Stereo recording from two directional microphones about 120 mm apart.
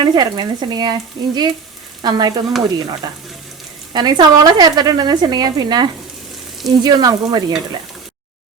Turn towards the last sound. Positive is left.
turn(degrees=-35)  # may be behind; listen again after turning